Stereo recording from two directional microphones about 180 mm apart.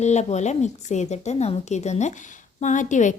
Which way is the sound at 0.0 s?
40° left (ahead or behind).